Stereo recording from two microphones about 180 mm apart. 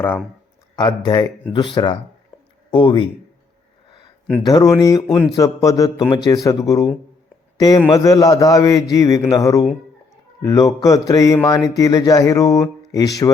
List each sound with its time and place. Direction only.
0.8 s a man's voice: 25° left (ahead or behind)
4.4 s a man's voice: 20° left (ahead or behind)
7.6 s a man's voice: 20° left (ahead or behind)